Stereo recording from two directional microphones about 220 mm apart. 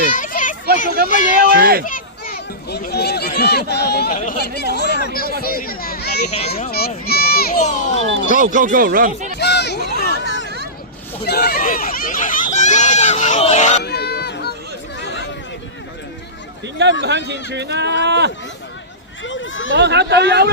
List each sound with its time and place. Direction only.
0.2 s children playing: 35° left (ahead or behind)
0.9 s speech: 40° right (ahead or behind)
1.8 s speech: 40° left (ahead or behind)
8.4 s speech: 35° right (ahead or behind)
9.4 s a sound: 50° left (ahead or behind)
11.2 s speech: 45° left (ahead or behind)
13.8 s a sound: 50° left (ahead or behind)
15.0 s chatter: 55° left (ahead or behind)
17.0 s speech: 50° right (ahead or behind)
19.2 s a sound: 60° left (ahead or behind)
19.7 s speech: 50° right (ahead or behind)